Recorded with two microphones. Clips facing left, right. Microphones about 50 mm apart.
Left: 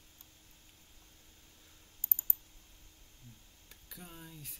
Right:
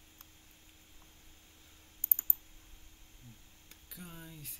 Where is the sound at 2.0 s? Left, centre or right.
Right.